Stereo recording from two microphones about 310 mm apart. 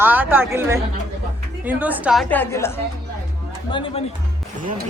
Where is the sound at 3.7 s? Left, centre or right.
Centre.